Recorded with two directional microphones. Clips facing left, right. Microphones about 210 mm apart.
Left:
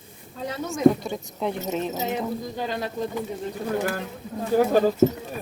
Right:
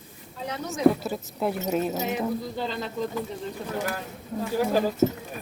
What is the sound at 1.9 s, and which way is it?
Speech, 20° left (ahead or behind).